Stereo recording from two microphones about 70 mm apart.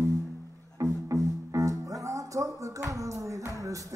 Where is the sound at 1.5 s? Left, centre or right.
Right.